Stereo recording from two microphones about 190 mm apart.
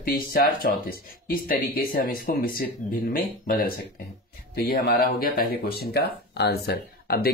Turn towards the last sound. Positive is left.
turn(degrees=55)  # may be behind; listen again after turning